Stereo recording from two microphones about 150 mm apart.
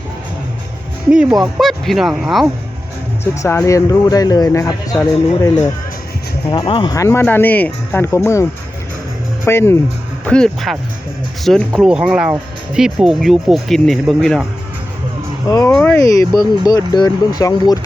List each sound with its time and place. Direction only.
1.5 s speech: centre (ahead or behind)
3.4 s speech: 20° left (ahead or behind)
6.5 s speech: 30° left (ahead or behind)
6.9 s speech: 20° left (ahead or behind)
10.2 s speech: 5° left (ahead or behind)
15.4 s speech: 25° left (ahead or behind)
15.7 s speech: 10° left (ahead or behind)